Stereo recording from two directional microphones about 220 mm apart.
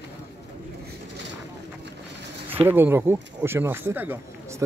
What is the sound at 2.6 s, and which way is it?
Speech, 10° right (ahead or behind).